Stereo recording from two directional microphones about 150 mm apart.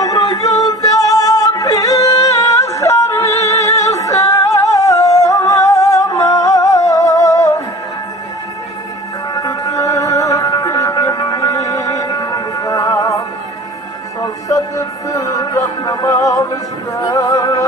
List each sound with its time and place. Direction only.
0.0 s music: 25° left (ahead or behind)
9.3 s music: 25° left (ahead or behind)
10.6 s a sound: 20° left (ahead or behind)
14.2 s music: 25° left (ahead or behind)